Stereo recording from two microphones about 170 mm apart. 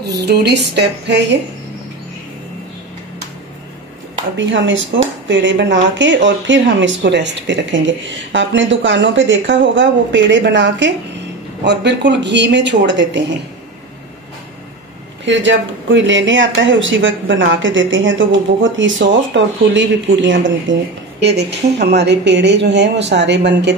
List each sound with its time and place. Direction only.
0.2 s speech: 75° right (ahead or behind)
4.4 s speech: 90° right
15.2 s speech: 90° right